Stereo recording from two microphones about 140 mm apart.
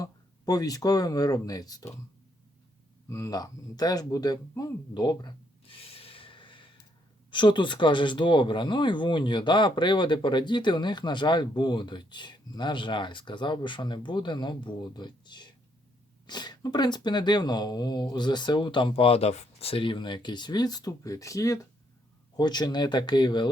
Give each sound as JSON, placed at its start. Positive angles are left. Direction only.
{"t": 0.0, "sound": "speech", "side_deg": 25}
{"t": 3.1, "sound": "speech", "side_deg": 25}